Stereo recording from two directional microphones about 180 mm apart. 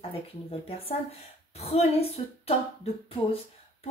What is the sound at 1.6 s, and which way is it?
Speech, 35° left (ahead or behind).